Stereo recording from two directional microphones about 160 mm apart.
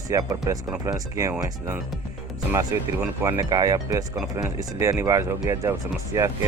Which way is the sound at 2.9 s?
10° right (ahead or behind).